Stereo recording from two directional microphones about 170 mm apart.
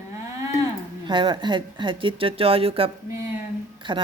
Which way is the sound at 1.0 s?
30° right (ahead or behind).